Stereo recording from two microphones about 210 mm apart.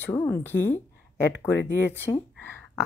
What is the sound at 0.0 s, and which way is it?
Speech, 10° left (ahead or behind).